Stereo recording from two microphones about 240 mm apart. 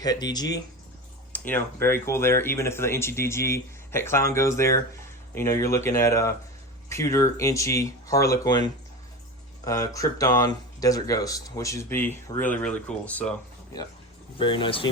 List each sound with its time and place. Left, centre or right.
0.0 s speech: centre
14.3 s speech: left